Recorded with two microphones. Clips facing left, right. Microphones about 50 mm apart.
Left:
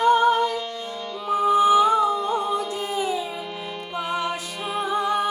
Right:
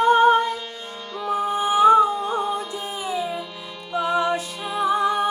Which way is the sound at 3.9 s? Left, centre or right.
Left.